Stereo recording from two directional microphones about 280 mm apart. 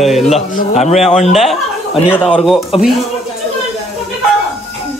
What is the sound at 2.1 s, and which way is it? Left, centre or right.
Speech, centre.